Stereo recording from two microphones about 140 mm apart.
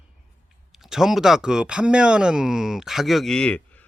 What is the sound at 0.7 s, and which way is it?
Speech, 5° right (ahead or behind).